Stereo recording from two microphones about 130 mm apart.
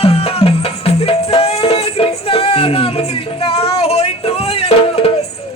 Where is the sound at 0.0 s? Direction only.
50° left (ahead or behind).